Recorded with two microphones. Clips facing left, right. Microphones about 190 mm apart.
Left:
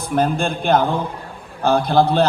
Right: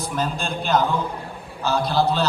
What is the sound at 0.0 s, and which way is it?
A man's voice, 55° left (ahead or behind).